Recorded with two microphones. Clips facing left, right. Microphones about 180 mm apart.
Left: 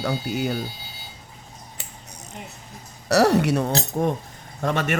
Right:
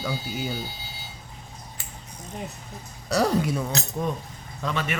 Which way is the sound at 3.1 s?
70° left (ahead or behind).